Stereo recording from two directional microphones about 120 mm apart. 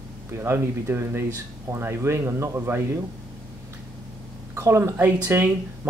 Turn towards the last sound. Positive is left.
turn(degrees=-20)  # may be behind; listen again after turning